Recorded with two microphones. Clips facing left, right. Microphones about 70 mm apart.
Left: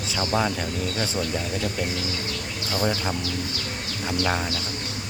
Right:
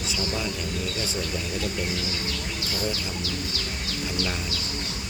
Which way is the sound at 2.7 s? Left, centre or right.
Left.